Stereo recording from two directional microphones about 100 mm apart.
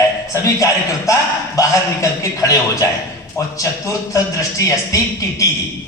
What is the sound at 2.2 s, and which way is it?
Speech, 30° left (ahead or behind).